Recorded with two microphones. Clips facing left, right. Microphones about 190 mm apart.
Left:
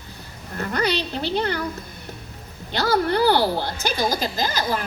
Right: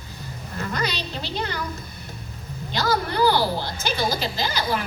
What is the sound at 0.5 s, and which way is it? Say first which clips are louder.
A woman's voice: left 5 dB; 60° left (ahead or behind).